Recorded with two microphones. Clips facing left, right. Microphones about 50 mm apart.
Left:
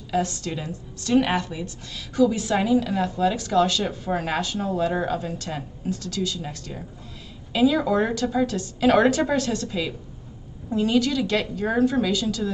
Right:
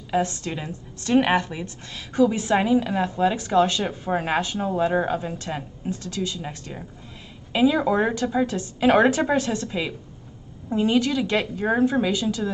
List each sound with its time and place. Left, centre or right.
0.1 s a woman's voice: right